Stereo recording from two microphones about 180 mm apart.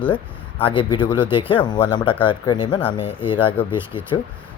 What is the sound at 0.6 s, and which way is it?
Speech, 30° left (ahead or behind).